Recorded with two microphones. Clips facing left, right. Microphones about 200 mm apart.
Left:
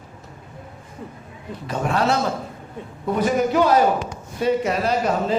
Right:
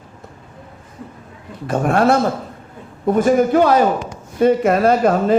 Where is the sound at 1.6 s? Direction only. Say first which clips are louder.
Right 6 dB; 50° right (ahead or behind).